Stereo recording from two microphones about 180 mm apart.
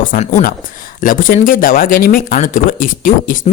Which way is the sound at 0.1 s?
55° left (ahead or behind).